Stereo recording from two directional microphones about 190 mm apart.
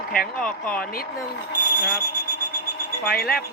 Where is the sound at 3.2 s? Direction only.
55° left (ahead or behind).